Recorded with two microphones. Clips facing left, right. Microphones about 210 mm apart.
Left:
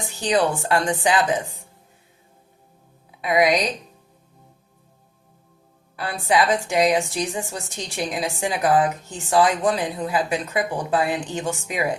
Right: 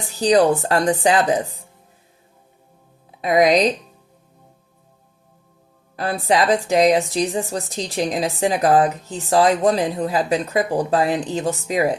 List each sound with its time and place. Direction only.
0.0 s a woman's voice: 40° right (ahead or behind)
3.2 s a woman's voice: 40° right (ahead or behind)
6.0 s a woman's voice: 35° right (ahead or behind)